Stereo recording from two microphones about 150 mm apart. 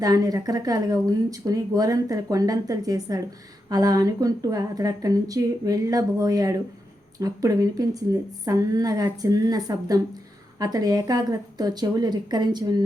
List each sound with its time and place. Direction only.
0.0 s speech: 25° right (ahead or behind)